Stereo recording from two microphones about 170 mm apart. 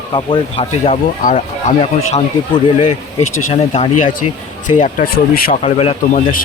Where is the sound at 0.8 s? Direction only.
45° left (ahead or behind).